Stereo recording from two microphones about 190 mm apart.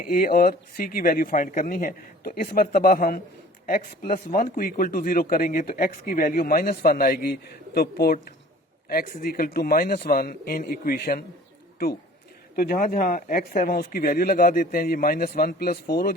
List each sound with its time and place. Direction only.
0.0 s a man's voice: 50° left (ahead or behind)
12.5 s a man's voice: 50° left (ahead or behind)